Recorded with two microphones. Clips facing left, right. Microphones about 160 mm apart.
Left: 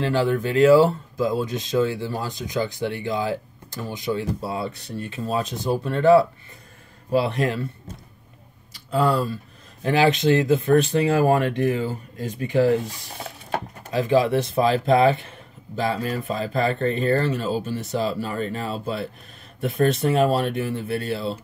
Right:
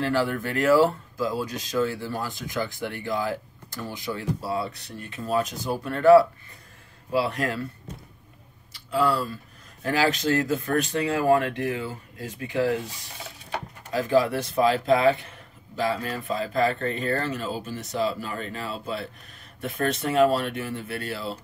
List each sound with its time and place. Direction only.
0.0 s speech: 20° left (ahead or behind)
8.9 s speech: 35° left (ahead or behind)
9.8 s speech: 20° left (ahead or behind)
13.9 s speech: 20° left (ahead or behind)